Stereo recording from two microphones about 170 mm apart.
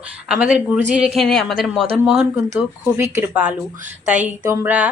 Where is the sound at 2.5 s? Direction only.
15° right (ahead or behind).